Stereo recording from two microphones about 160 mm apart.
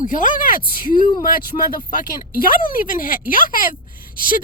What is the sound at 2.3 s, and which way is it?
A woman's voice, 60° left (ahead or behind).